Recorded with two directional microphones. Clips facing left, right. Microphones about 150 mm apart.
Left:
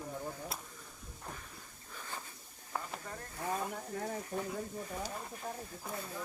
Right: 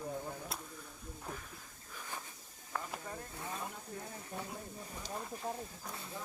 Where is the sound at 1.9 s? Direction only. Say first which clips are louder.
Left 1 dB; 10° right (ahead or behind).